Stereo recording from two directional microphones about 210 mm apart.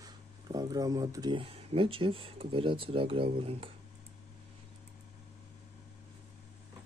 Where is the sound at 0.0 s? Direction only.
20° right (ahead or behind).